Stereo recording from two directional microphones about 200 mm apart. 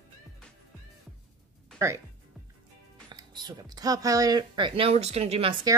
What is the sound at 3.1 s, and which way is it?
Speech, 20° right (ahead or behind).